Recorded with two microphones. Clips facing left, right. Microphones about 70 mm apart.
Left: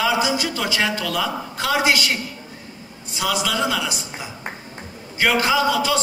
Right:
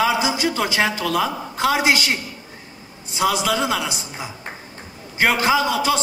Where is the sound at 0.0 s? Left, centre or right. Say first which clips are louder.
Right 1 dB; right.